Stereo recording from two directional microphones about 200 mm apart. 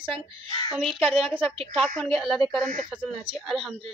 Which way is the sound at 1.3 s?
25° right (ahead or behind).